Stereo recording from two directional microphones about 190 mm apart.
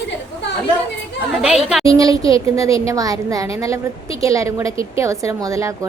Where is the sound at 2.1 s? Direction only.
30° left (ahead or behind).